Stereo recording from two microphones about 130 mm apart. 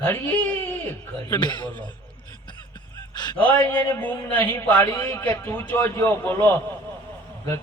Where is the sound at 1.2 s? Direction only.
35° left (ahead or behind).